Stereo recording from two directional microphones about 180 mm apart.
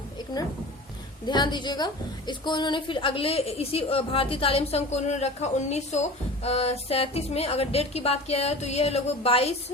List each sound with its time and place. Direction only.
1.2 s a woman's voice: 25° left (ahead or behind)